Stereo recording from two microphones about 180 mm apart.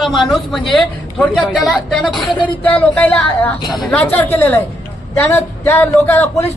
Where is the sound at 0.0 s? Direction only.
Centre (ahead or behind).